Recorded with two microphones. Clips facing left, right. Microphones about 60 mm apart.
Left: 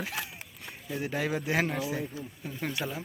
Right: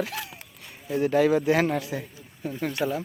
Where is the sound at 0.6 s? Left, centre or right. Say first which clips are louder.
Right 9 dB; centre.